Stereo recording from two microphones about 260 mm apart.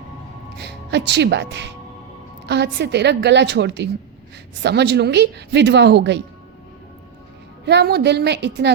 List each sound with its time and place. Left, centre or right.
0.6 s a woman's voice: right
7.6 s a woman's voice: right